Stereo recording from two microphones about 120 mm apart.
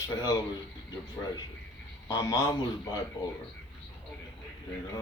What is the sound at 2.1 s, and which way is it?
Speech, 30° left (ahead or behind).